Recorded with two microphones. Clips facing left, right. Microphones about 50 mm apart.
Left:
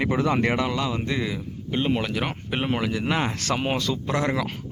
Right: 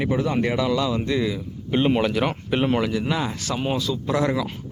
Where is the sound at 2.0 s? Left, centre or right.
Centre.